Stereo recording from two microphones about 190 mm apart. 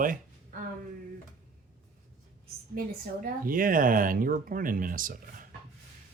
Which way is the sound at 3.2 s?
50° right (ahead or behind).